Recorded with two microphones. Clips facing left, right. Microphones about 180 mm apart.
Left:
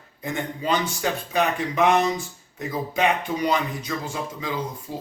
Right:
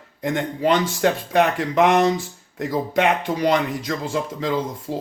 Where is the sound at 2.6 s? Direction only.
75° right (ahead or behind).